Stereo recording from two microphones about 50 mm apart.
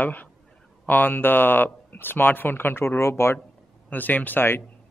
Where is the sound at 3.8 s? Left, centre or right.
Left.